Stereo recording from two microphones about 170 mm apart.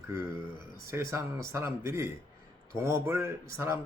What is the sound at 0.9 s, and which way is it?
A man's voice, 15° right (ahead or behind).